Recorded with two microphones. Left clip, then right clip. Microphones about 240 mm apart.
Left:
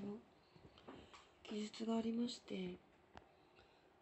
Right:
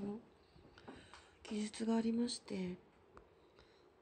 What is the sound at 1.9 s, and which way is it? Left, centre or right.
Speech, centre.